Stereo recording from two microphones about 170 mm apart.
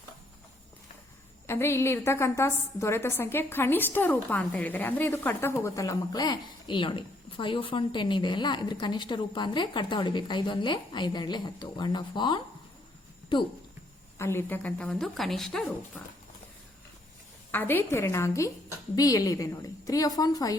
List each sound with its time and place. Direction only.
1.5 s a woman's voice: 15° left (ahead or behind)
14.2 s a woman's voice: 15° left (ahead or behind)
17.5 s a woman's voice: 10° left (ahead or behind)